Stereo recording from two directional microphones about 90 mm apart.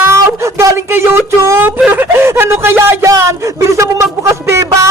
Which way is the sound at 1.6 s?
20° right (ahead or behind).